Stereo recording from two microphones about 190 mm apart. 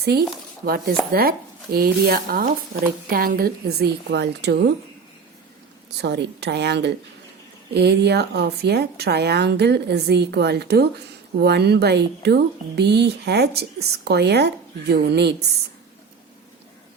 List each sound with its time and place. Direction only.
0.0 s a woman's voice: 55° right (ahead or behind)
6.0 s a woman's voice: 65° right (ahead or behind)